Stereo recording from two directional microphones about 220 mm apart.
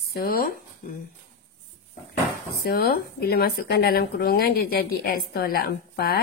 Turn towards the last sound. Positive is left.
turn(degrees=45)  # may be behind; listen again after turning